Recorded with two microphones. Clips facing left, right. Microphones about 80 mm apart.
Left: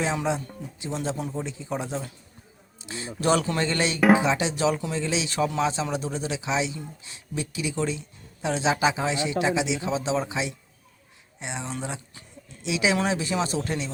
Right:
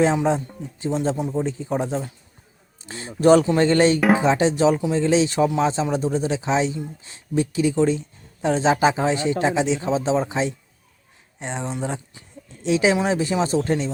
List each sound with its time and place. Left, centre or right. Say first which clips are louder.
0.0 s speech: right 7 dB; right
1.5 s speech: right 7 dB; right